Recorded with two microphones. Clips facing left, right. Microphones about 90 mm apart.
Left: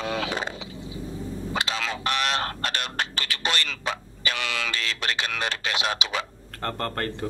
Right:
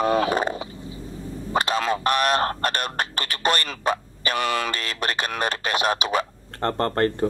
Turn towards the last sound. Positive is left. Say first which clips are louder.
# right 7 dB
turn(degrees=-35)  # may be behind; listen again after turning